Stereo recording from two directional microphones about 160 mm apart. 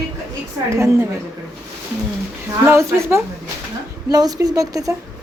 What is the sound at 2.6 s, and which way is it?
A woman's voice, 15° right (ahead or behind).